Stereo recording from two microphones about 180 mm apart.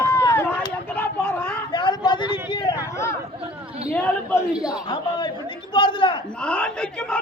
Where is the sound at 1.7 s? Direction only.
25° left (ahead or behind).